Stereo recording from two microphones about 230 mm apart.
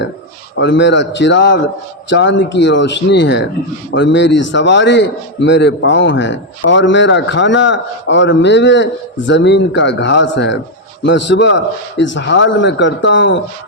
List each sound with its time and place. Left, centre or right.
0.6 s a man's voice: left